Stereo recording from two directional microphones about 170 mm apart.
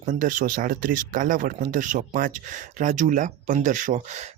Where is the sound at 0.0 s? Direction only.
50° right (ahead or behind).